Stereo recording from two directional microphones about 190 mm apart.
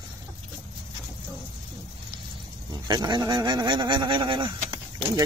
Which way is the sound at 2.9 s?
20° right (ahead or behind).